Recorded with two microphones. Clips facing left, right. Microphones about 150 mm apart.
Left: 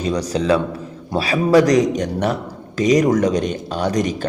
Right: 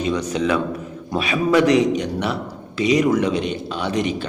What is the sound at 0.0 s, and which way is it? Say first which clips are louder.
A man's voice: left 1 dB; 35° left (ahead or behind).